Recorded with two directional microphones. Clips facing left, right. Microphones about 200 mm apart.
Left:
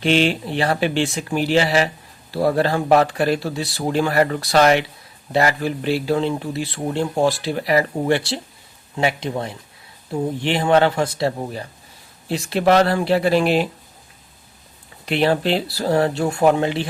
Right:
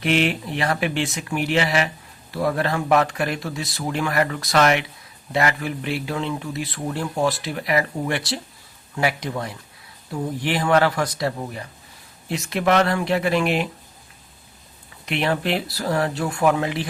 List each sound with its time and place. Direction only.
0.0 s speech: 30° left (ahead or behind)
15.0 s speech: 30° left (ahead or behind)